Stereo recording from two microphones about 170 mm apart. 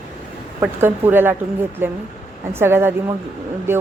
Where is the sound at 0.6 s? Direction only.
10° right (ahead or behind).